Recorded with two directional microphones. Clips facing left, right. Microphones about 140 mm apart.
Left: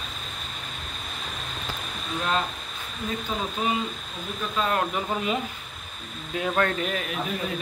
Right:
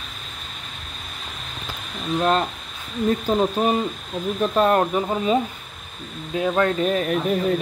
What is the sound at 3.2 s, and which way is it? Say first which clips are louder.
Speech: right 6 dB; 40° right (ahead or behind).